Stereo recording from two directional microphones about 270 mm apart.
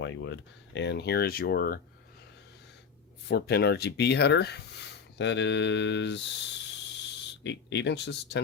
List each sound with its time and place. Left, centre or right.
0.0 s speech: left
3.2 s speech: left
7.4 s speech: left